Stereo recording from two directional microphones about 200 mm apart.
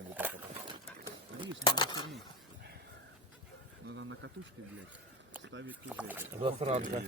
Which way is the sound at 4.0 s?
65° right (ahead or behind).